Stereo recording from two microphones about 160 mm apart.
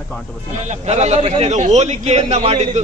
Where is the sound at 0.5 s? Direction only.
45° right (ahead or behind).